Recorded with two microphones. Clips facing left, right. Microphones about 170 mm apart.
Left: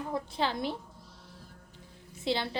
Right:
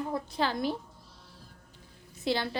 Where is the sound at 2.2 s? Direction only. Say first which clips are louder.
Right 1 dB; 25° left (ahead or behind).